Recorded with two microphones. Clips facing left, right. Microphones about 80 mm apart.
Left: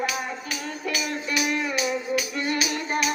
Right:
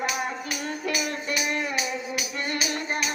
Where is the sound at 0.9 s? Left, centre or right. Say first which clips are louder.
Left 1 dB; right.